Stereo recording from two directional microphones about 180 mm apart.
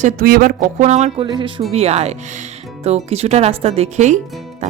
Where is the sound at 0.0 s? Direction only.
55° right (ahead or behind).